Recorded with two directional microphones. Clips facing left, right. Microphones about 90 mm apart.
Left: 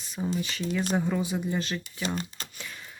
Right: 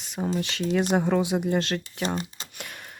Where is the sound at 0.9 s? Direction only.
65° right (ahead or behind).